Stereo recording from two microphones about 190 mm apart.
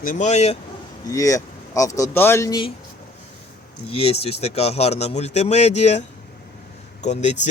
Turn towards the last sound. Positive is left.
turn(degrees=40)  # may be behind; listen again after turning